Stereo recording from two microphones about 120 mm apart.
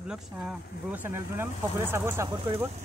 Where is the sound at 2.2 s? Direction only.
45° right (ahead or behind).